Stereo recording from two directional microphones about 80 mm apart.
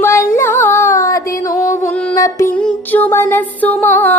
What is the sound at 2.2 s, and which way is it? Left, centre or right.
Music, left.